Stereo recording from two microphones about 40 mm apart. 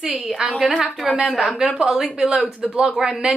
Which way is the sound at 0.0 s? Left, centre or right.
Centre.